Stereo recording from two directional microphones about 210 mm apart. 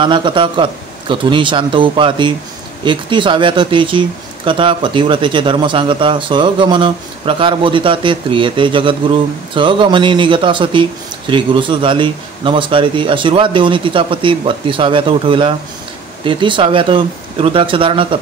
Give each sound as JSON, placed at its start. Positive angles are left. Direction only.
{"t": 0.0, "sound": "speech", "side_deg": -25}